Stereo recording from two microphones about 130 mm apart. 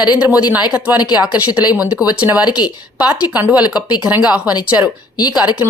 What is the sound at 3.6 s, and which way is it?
Speech, 30° left (ahead or behind).